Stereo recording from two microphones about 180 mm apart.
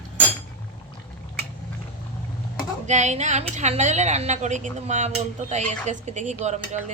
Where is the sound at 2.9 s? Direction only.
40° right (ahead or behind).